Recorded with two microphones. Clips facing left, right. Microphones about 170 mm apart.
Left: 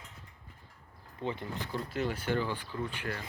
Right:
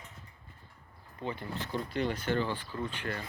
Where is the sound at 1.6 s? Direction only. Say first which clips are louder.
Right 2 dB; 5° left (ahead or behind).